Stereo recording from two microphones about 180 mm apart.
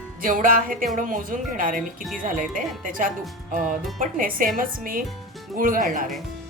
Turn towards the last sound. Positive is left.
turn(degrees=-50)  # may be behind; listen again after turning